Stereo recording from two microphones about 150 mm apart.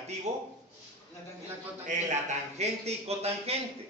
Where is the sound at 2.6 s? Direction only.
45° right (ahead or behind).